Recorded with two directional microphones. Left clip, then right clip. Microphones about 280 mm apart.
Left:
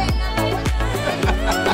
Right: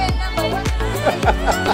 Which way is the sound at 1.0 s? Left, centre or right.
Centre.